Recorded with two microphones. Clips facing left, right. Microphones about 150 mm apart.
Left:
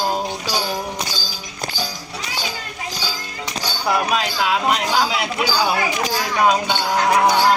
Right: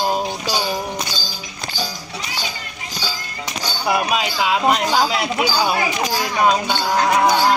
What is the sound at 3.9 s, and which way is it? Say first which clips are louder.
Speech: even; 5° right (ahead or behind).